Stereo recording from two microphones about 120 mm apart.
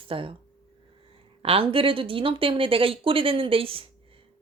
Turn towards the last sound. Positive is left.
turn(degrees=-50)  # may be behind; listen again after turning